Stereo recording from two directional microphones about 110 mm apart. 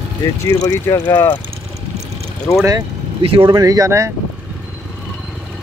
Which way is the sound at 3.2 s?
55° right (ahead or behind).